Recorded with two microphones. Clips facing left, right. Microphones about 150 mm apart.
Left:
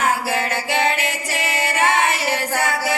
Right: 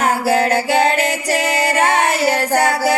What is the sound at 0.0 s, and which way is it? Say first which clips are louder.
Music: right 5 dB; 40° right (ahead or behind).